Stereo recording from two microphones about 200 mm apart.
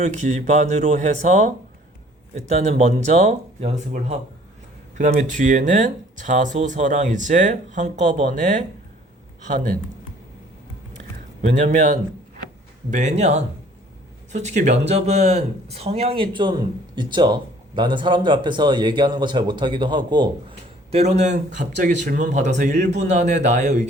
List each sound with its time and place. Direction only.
0.0 s speech: 35° right (ahead or behind)
11.4 s speech: 35° right (ahead or behind)
20.9 s speech: 35° right (ahead or behind)